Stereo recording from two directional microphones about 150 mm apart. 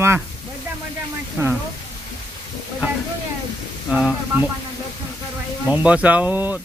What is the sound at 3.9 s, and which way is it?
Speech, 5° right (ahead or behind).